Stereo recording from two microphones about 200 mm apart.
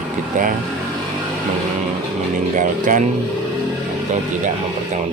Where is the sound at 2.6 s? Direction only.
40° right (ahead or behind).